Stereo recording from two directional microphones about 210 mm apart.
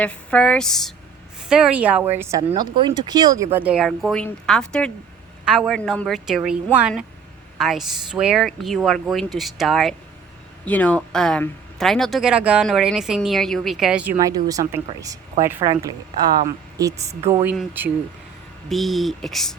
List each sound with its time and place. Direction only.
0.0 s speech: 5° left (ahead or behind); by 2.4 s 10° right (ahead or behind)
2.5 s speech: 20° right (ahead or behind); by 6.6 s centre (ahead or behind)
7.6 s speech: centre (ahead or behind)